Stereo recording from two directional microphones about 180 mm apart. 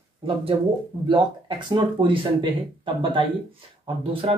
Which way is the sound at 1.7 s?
25° right (ahead or behind).